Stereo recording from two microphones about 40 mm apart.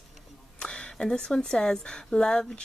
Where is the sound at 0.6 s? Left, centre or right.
Left.